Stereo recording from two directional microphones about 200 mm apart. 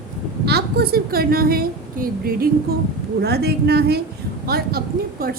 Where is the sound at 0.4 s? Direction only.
55° right (ahead or behind).